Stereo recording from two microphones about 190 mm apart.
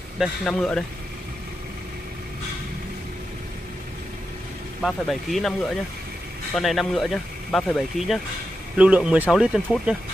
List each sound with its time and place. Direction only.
0.2 s speech: 5° left (ahead or behind)
4.8 s speech: centre (ahead or behind)
6.5 s speech: centre (ahead or behind)